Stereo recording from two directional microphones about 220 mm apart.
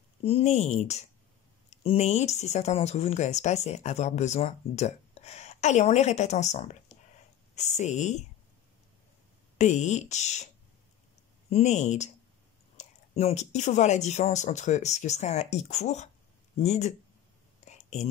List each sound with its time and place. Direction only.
0.2 s speech: 30° left (ahead or behind)
9.6 s speech: 30° left (ahead or behind)
11.5 s speech: 30° left (ahead or behind)
17.6 s whispering: 30° left (ahead or behind)